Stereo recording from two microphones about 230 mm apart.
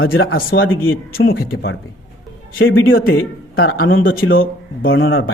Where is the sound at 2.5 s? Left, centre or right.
Left.